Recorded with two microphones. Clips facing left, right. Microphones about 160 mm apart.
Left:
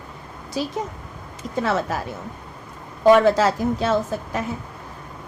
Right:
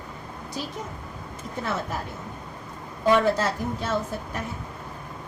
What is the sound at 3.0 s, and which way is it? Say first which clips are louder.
A woman's voice: left 7 dB; 90° left.